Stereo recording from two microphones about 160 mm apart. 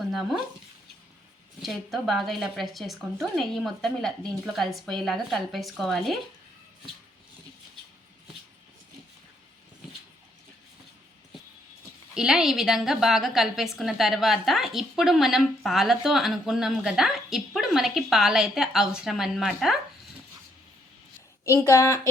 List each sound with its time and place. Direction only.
0.1 s speech: centre (ahead or behind)
1.6 s a woman's voice: centre (ahead or behind)
12.1 s a woman's voice: 5° right (ahead or behind)
21.4 s a woman's voice: 20° left (ahead or behind)